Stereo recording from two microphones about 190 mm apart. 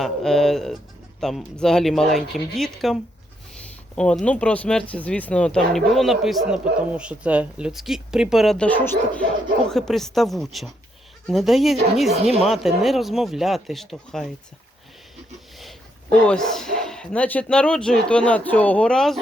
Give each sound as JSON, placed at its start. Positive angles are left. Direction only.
{"t": 0.0, "sound": "speech", "side_deg": 0}
{"t": 16.2, "sound": "speech", "side_deg": 5}